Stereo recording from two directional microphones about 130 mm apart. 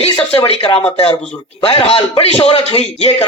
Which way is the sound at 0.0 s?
50° left (ahead or behind).